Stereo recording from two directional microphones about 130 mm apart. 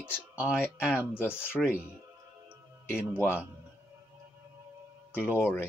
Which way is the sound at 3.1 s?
15° left (ahead or behind).